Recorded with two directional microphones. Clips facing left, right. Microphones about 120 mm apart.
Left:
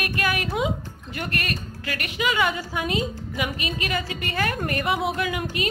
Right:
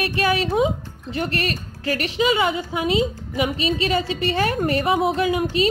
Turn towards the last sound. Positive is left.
turn(degrees=-25)  # may be behind; listen again after turning